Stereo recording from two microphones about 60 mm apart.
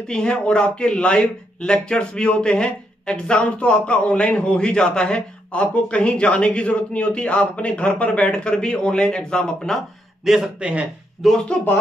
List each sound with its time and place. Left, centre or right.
0.1 s speech: centre
10.2 s speech: centre
10.6 s a man's voice: right
11.2 s speech: centre